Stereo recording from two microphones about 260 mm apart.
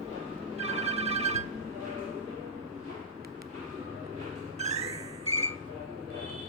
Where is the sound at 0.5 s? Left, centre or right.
Right.